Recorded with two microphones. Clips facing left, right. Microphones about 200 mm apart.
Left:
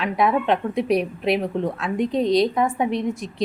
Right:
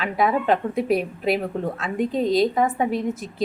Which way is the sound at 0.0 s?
Centre (ahead or behind).